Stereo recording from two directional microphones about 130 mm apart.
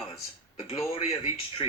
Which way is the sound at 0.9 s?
50° left (ahead or behind).